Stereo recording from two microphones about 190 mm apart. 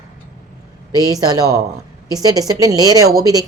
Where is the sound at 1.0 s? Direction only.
20° right (ahead or behind).